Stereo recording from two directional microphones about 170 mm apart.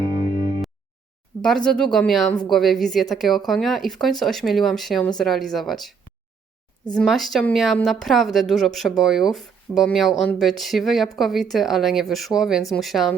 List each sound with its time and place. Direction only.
1.4 s speech: 5° left (ahead or behind)
6.9 s speech: centre (ahead or behind)